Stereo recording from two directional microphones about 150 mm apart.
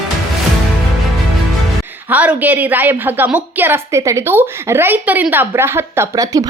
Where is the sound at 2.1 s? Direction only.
10° right (ahead or behind).